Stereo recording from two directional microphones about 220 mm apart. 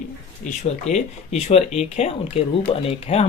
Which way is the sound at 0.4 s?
30° left (ahead or behind).